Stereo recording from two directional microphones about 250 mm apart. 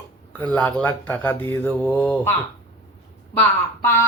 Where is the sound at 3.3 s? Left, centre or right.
Centre.